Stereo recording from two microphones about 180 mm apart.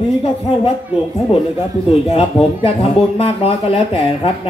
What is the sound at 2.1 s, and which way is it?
Speech, 30° left (ahead or behind).